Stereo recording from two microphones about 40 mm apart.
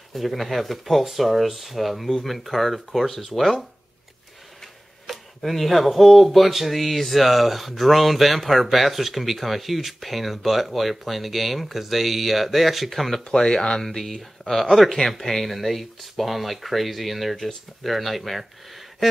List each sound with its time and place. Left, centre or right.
0.1 s speech: centre
5.0 s speech: centre
13.2 s speech: centre